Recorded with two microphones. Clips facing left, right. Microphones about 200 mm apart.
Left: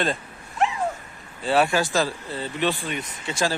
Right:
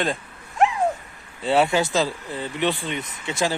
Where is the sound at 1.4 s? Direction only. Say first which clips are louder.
Right 1 dB; 20° right (ahead or behind).